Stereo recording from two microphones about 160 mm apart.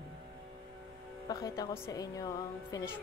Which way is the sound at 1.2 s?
20° left (ahead or behind).